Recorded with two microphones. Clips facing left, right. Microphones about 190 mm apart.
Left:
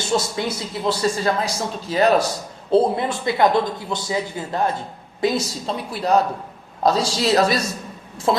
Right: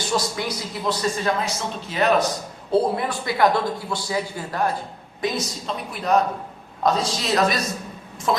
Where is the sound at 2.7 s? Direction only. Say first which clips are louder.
Left 3 dB; 25° left (ahead or behind).